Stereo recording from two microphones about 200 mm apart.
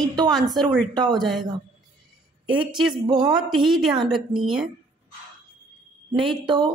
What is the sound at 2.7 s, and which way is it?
Speech, centre (ahead or behind).